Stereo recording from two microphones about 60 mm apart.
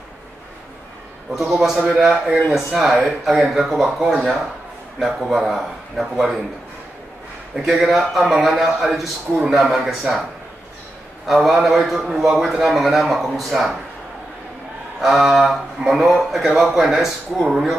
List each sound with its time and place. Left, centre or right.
1.3 s a man's voice: centre
3.8 s a man's voice: centre
7.5 s a man's voice: centre
11.2 s a man's voice: centre
15.0 s a man's voice: centre